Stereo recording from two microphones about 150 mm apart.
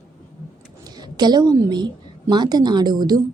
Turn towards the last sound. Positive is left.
turn(degrees=-25)  # may be behind; listen again after turning